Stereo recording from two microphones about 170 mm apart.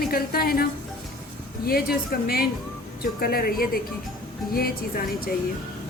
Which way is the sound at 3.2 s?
60° left (ahead or behind).